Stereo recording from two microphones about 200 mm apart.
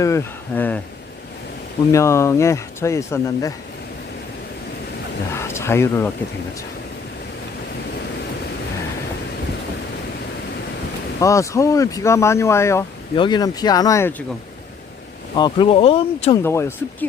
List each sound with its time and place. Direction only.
0.0 s speech: 15° left (ahead or behind)
1.9 s speech: 15° left (ahead or behind)
5.3 s speech: 15° left (ahead or behind)
11.2 s speech: 15° left (ahead or behind)
15.4 s speech: 25° left (ahead or behind)
16.4 s speech: 10° left (ahead or behind)